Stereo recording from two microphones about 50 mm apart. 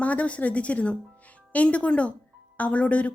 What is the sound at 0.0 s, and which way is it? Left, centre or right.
A woman's voice, left.